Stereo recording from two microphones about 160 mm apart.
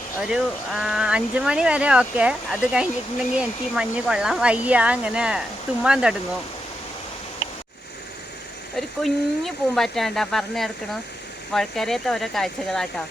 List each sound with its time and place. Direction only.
0.2 s speech: 5° right (ahead or behind)
8.7 s speech: centre (ahead or behind)